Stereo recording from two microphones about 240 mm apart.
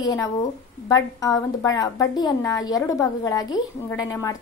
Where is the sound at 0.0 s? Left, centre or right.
Centre.